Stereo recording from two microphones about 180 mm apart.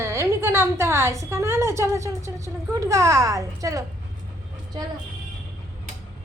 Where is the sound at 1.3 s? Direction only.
15° right (ahead or behind).